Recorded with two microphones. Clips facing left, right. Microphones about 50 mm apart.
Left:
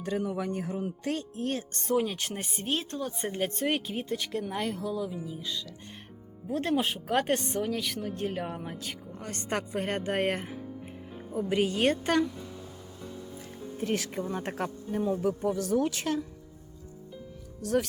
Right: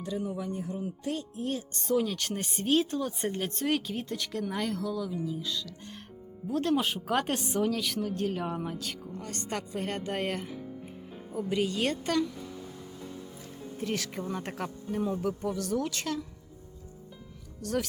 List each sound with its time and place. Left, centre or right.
0.0 s speech: left
1.9 s speech: left
2.1 s speech: centre
2.5 s speech: centre
3.3 s speech: centre
9.2 s speech: left
9.5 s a woman's voice: left
13.8 s speech: left
15.6 s a woman's voice: left